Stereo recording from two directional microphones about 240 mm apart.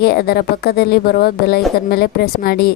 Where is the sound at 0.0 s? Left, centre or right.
Left.